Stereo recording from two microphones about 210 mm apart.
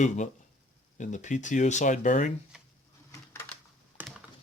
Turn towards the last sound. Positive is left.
turn(degrees=10)  # may be behind; listen again after turning